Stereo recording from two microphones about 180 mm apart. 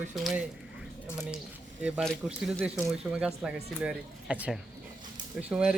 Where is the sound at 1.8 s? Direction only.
Centre (ahead or behind).